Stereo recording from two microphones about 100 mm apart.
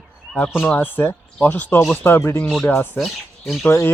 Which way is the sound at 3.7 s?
25° left (ahead or behind).